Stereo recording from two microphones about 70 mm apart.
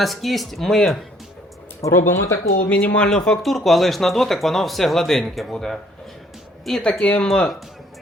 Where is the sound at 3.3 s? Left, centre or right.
Centre.